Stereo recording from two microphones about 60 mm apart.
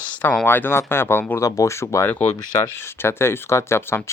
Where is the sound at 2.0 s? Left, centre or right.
Left.